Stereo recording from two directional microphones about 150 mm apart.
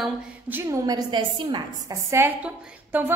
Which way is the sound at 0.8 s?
30° right (ahead or behind).